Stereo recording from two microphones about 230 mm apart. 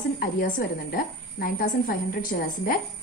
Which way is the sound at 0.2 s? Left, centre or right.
Left.